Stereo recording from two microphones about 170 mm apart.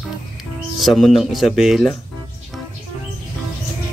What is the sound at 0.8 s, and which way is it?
Speech, centre (ahead or behind).